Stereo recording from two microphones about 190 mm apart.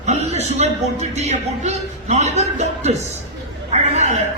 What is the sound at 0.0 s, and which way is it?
A man's voice, 35° right (ahead or behind).